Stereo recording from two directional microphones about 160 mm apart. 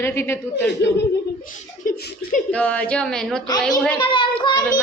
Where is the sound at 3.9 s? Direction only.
30° left (ahead or behind).